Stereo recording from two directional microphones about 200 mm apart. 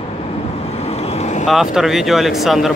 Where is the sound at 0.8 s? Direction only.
30° left (ahead or behind).